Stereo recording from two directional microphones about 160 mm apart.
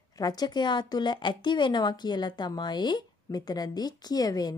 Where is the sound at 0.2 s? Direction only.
25° left (ahead or behind).